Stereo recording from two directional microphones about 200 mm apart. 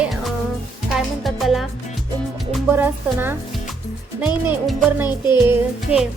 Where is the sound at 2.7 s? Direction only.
10° right (ahead or behind).